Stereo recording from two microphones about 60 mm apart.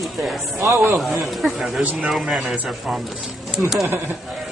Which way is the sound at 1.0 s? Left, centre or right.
Centre.